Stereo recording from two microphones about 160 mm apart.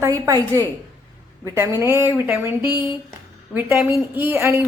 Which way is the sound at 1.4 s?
15° right (ahead or behind).